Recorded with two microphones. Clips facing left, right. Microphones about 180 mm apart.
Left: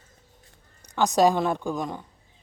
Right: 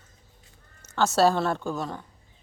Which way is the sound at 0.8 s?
15° left (ahead or behind).